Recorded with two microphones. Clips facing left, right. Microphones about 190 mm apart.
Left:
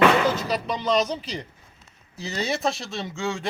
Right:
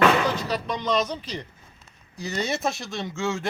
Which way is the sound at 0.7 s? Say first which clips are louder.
Left 2 dB; 10° left (ahead or behind).